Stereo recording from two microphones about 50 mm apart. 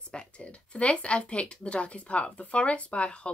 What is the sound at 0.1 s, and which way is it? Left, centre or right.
A woman's voice, left.